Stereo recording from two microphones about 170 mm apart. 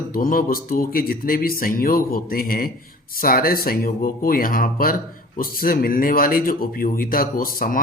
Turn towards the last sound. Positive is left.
turn(degrees=55)  # may be behind; listen again after turning